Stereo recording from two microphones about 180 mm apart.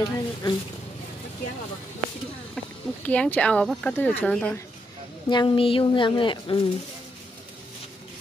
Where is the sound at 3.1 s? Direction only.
10° left (ahead or behind).